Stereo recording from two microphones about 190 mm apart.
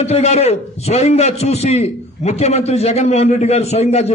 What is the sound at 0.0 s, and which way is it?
A man's voice, 35° left (ahead or behind).